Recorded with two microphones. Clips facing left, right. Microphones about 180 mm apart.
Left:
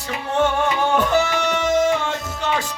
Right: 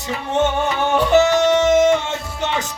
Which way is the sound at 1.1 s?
20° right (ahead or behind).